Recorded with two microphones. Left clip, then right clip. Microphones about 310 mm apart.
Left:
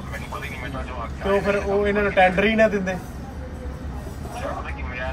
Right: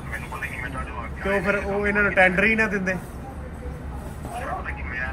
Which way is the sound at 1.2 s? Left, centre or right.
Centre.